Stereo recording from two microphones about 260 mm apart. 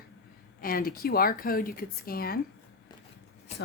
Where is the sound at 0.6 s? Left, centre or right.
Left.